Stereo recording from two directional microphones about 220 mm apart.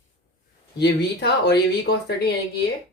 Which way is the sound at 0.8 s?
50° left (ahead or behind).